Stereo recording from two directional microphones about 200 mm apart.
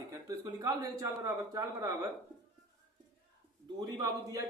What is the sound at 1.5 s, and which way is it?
Speech, 20° right (ahead or behind).